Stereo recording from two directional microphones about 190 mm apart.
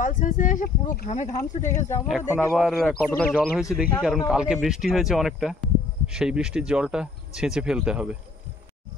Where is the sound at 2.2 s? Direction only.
10° left (ahead or behind).